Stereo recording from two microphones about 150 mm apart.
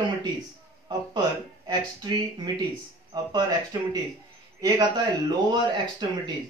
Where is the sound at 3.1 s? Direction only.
25° right (ahead or behind).